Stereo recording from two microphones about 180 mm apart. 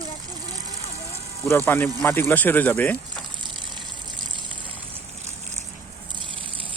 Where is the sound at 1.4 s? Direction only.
15° left (ahead or behind).